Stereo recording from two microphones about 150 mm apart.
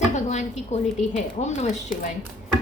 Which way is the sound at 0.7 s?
50° left (ahead or behind).